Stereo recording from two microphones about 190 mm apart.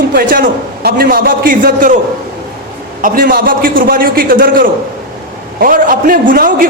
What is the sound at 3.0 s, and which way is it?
A man's voice, 45° right (ahead or behind).